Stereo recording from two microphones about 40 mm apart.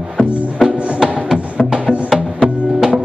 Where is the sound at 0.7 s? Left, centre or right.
Centre.